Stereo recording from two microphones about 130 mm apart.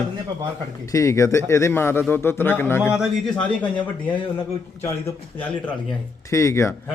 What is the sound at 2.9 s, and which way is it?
Speech, centre (ahead or behind).